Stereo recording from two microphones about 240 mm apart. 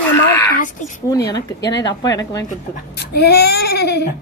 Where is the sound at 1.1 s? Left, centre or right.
Centre.